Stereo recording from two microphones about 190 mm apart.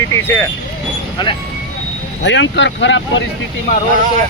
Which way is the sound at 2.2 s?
70° left (ahead or behind).